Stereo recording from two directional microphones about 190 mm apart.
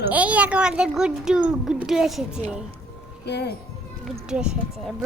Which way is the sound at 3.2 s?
60° left (ahead or behind).